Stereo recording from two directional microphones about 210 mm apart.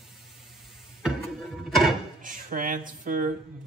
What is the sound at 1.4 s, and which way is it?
Music, centre (ahead or behind).